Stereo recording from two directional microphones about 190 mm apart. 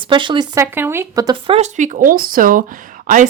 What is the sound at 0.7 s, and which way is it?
Speech, 10° right (ahead or behind).